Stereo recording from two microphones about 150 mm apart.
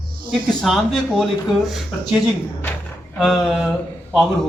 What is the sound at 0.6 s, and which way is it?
A man's voice, centre (ahead or behind).